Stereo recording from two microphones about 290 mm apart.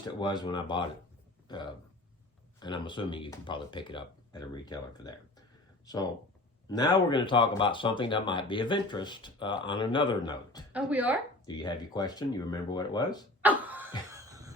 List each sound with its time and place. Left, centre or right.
0.0 s speech: centre
10.7 s a woman's voice: centre
11.4 s speech: centre
13.4 s a sound: centre